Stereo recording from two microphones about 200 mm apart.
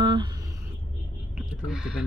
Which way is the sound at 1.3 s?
5° right (ahead or behind).